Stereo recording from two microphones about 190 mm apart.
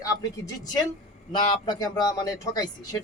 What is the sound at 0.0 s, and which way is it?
Speech, 20° left (ahead or behind).